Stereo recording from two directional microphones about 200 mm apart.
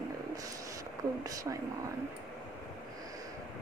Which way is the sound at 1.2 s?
15° right (ahead or behind).